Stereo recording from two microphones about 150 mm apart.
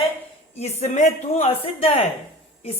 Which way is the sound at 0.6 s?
45° left (ahead or behind).